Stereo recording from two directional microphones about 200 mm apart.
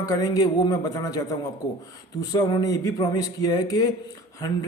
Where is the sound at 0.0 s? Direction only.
20° left (ahead or behind).